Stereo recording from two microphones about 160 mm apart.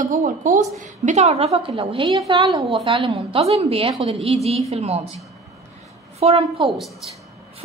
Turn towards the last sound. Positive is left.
turn(degrees=-40)  # may be behind; listen again after turning